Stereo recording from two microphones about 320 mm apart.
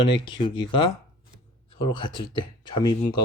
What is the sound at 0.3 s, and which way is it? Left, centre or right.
Speech, centre.